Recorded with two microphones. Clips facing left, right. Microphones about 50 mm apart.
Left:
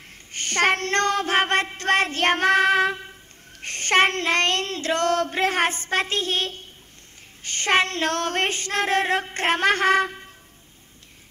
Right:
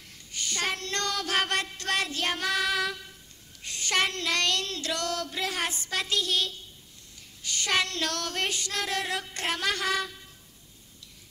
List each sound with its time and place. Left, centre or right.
0.3 s child singing: left
3.6 s female singing: left